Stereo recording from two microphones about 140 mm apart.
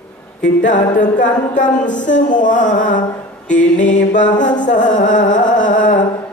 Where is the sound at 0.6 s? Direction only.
65° left (ahead or behind).